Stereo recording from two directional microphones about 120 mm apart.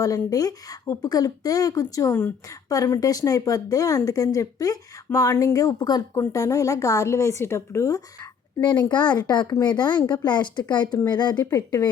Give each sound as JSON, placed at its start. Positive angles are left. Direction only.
{"t": 0.0, "sound": "a woman's voice", "side_deg": 30}
{"t": 8.6, "sound": "speech", "side_deg": 40}